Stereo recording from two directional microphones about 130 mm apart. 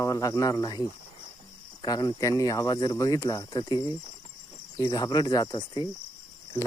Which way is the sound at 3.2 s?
25° left (ahead or behind).